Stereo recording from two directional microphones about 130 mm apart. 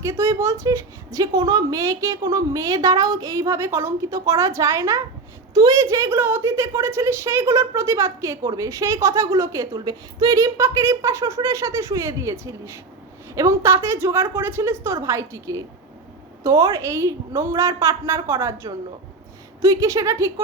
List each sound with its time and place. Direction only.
0.0 s a woman's voice: 20° right (ahead or behind)